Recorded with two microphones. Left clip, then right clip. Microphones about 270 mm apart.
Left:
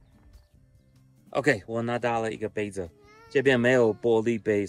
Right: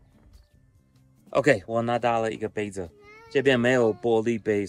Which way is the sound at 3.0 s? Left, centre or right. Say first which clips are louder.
Right 4 dB; right.